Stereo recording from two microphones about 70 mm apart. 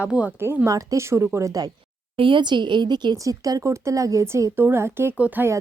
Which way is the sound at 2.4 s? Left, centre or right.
Right.